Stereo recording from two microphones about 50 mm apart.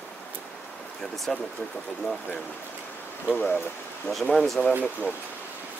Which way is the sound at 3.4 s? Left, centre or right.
Left.